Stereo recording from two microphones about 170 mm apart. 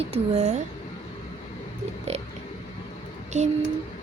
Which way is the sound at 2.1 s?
40° right (ahead or behind).